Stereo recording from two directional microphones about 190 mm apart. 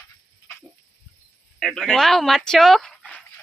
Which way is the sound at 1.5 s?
Centre (ahead or behind).